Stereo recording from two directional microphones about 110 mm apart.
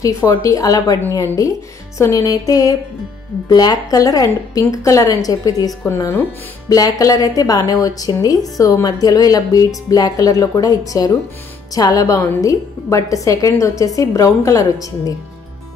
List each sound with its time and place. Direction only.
0.0 s speech: 30° left (ahead or behind)